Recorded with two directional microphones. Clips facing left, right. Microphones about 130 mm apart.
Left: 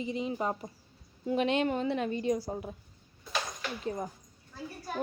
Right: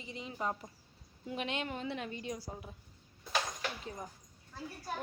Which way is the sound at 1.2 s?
35° left (ahead or behind).